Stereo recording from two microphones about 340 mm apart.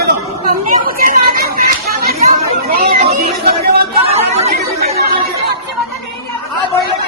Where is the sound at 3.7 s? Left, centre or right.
Centre.